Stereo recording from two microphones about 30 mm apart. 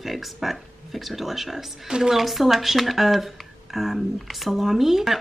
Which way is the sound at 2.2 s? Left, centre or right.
Centre.